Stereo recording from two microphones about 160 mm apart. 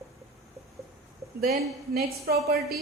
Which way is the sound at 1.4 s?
70° right (ahead or behind).